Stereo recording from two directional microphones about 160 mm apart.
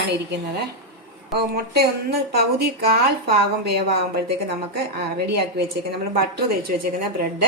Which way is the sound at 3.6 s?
90° right.